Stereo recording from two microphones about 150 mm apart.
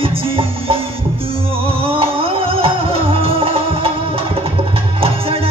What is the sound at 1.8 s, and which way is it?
Music, 40° right (ahead or behind).